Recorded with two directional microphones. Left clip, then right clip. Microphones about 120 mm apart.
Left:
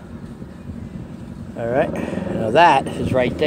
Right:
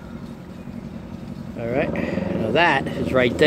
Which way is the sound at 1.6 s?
15° left (ahead or behind).